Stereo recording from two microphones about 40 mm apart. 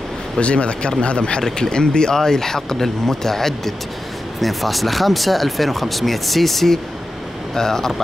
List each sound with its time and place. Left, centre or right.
0.4 s speech: left; by 7.9 s centre